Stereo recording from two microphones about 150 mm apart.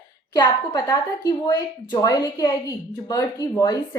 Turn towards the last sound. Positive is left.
turn(degrees=25)  # may be behind; listen again after turning